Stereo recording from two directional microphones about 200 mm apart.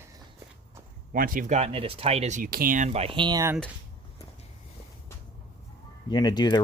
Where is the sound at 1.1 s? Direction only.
45° right (ahead or behind); by 3.6 s 15° right (ahead or behind).